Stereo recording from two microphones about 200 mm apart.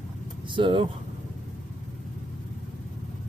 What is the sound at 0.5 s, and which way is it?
Speech, 25° right (ahead or behind).